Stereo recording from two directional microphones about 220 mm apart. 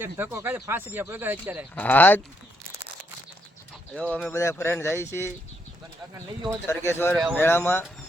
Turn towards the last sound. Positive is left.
turn(degrees=10)  # may be behind; listen again after turning